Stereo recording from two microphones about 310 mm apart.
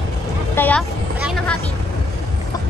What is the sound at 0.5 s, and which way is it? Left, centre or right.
Vehicle, centre.